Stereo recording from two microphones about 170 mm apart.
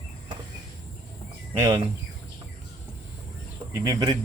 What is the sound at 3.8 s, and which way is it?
Speech, 20° right (ahead or behind).